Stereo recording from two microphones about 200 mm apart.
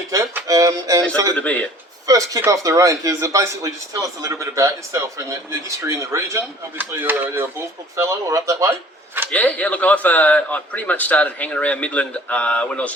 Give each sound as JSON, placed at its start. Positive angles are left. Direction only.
{"t": 0.1, "sound": "speech", "side_deg": -15}
{"t": 1.4, "sound": "speech", "side_deg": 5}
{"t": 2.0, "sound": "speech", "side_deg": -15}
{"t": 9.3, "sound": "speech", "side_deg": 5}